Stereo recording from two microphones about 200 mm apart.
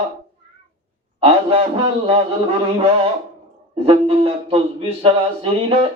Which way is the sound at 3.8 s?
30° right (ahead or behind).